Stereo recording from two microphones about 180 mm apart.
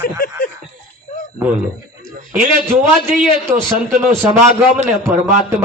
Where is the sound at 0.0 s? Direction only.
55° left (ahead or behind).